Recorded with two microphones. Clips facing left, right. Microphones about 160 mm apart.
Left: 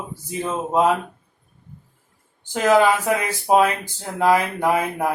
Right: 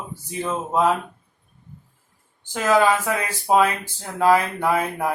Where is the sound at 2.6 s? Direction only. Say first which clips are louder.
Left 2 dB; 15° left (ahead or behind).